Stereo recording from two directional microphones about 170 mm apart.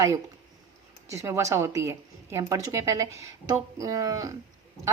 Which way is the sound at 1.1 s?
15° right (ahead or behind).